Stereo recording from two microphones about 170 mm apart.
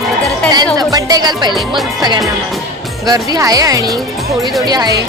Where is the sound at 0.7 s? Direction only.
20° right (ahead or behind).